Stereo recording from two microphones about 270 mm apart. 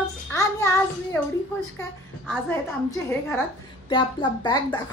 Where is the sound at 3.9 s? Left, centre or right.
Centre.